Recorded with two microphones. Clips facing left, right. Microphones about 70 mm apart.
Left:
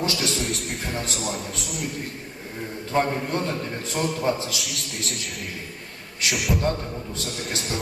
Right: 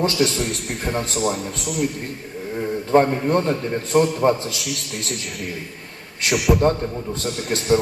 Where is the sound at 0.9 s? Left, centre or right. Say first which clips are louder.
Right 9 dB; right.